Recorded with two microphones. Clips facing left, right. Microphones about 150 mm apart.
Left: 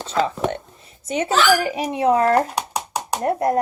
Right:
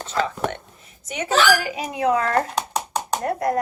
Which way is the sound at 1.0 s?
30° left (ahead or behind).